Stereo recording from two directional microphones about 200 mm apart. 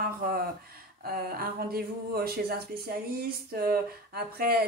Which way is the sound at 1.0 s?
50° right (ahead or behind).